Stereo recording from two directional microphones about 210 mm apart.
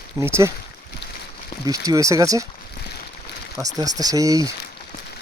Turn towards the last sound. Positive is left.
turn(degrees=-15)  # may be behind; listen again after turning